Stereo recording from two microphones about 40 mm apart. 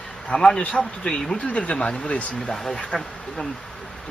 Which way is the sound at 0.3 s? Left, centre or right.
Centre.